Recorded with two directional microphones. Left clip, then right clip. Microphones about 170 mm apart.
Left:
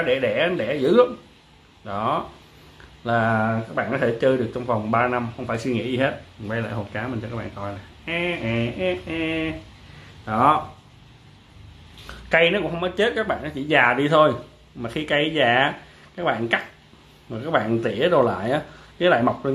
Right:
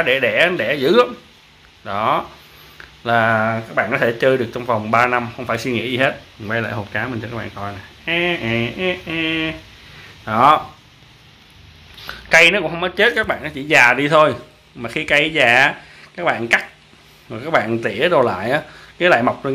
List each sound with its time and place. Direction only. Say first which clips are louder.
0.0 s a man's voice: right 6 dB; 25° right (ahead or behind); by 10.6 s 45° right (ahead or behind)
12.1 s speech: right 7 dB; 10° right (ahead or behind)